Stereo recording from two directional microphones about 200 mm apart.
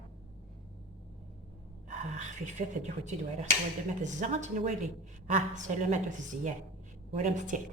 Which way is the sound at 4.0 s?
35° right (ahead or behind).